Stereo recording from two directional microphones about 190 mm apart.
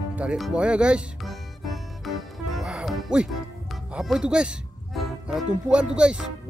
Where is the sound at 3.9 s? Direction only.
5° right (ahead or behind).